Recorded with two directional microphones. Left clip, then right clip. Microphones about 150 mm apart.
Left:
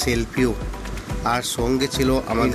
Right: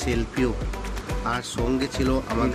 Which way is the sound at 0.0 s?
35° left (ahead or behind).